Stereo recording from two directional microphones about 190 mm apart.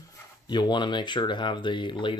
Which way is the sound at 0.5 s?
25° left (ahead or behind).